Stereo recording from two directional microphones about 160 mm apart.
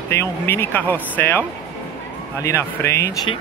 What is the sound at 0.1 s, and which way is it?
Speech, 15° left (ahead or behind).